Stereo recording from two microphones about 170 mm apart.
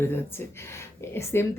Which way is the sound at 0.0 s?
15° left (ahead or behind).